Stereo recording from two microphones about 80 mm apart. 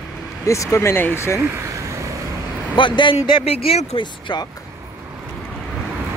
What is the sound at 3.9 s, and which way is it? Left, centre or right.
Speech, left.